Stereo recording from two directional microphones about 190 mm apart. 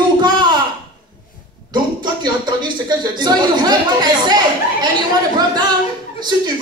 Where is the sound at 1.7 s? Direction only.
25° right (ahead or behind).